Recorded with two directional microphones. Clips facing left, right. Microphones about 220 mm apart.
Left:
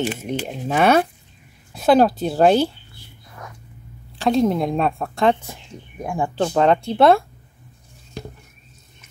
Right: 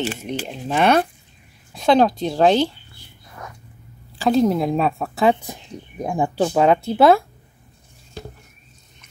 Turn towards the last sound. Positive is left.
turn(degrees=0)  # may be behind; listen again after turning